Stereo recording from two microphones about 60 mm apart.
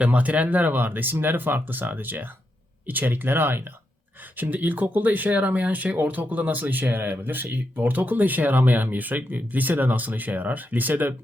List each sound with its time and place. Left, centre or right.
0.0 s speech: right